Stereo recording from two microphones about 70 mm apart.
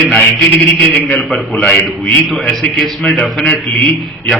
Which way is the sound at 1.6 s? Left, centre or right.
Centre.